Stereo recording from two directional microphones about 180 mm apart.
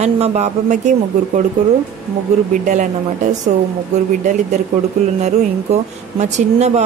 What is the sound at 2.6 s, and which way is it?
Speech, 45° right (ahead or behind).